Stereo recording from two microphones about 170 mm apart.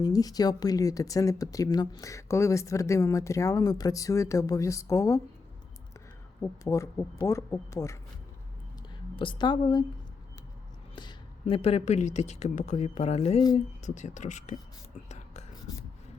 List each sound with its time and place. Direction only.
0.0 s speech: 20° left (ahead or behind)
6.4 s speech: 20° left (ahead or behind)
9.1 s speech: 30° left (ahead or behind)
10.9 s speech: 30° left (ahead or behind); by 14.5 s 45° left (ahead or behind)
15.1 s whispering: 40° left (ahead or behind)